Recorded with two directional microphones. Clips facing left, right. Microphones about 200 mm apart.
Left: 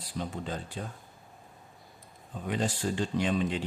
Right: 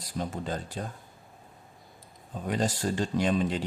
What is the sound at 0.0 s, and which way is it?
Speech, 40° right (ahead or behind).